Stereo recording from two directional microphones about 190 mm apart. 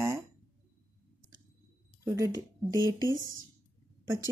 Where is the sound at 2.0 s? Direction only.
20° right (ahead or behind).